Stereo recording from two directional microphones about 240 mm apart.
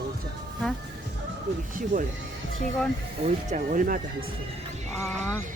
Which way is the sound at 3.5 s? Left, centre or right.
Right.